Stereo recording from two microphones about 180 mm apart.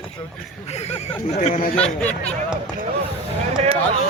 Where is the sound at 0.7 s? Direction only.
35° left (ahead or behind).